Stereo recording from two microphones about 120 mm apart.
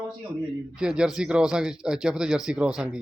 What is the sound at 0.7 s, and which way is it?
Speech, 5° right (ahead or behind).